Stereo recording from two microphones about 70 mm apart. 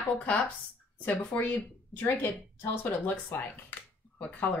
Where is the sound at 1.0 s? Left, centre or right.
Left.